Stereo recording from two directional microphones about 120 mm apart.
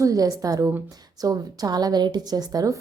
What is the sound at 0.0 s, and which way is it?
A woman's voice, 30° right (ahead or behind).